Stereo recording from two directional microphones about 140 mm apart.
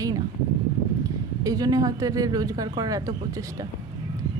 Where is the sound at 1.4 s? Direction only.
25° right (ahead or behind).